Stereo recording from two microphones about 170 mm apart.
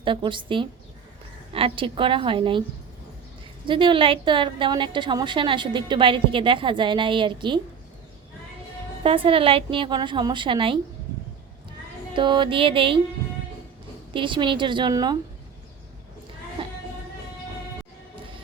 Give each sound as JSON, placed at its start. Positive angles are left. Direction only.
{"t": 0.0, "sound": "a woman's voice", "side_deg": -30}
{"t": 3.7, "sound": "a woman's voice", "side_deg": -30}
{"t": 9.0, "sound": "a woman's voice", "side_deg": -30}
{"t": 12.1, "sound": "a woman's voice", "side_deg": -30}
{"t": 14.1, "sound": "a woman's voice", "side_deg": -30}